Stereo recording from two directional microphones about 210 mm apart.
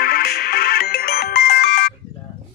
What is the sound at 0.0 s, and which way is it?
Ringtone, 45° left (ahead or behind).